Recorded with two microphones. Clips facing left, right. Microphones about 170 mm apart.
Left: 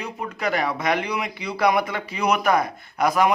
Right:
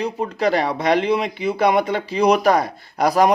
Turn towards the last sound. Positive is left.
turn(degrees=-35)  # may be behind; listen again after turning